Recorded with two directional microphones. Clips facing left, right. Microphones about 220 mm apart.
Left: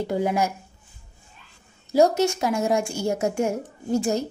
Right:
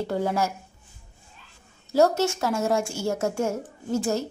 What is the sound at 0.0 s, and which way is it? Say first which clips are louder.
Speech: left 2 dB; 15° left (ahead or behind).